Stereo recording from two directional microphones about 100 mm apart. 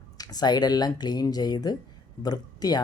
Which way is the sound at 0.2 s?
40° left (ahead or behind).